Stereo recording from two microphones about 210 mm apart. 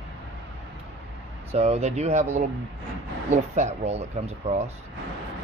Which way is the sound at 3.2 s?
35° right (ahead or behind).